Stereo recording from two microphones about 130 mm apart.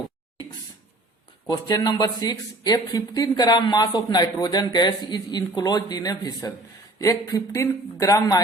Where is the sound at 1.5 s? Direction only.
30° left (ahead or behind).